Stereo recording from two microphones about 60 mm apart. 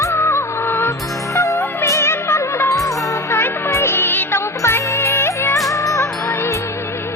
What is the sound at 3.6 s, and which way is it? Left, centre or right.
Music, left.